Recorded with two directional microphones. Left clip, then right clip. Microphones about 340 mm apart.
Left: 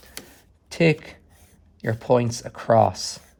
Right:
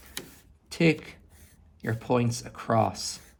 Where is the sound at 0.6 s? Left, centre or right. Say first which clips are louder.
Left 4 dB; left.